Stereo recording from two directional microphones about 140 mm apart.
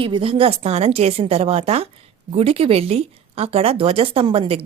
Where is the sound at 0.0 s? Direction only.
40° right (ahead or behind).